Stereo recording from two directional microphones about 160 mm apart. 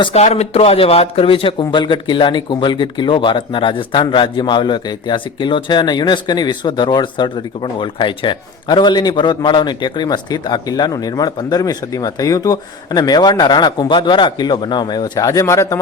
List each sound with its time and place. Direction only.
0.0 s speech: 40° left (ahead or behind); by 15.8 s 20° left (ahead or behind)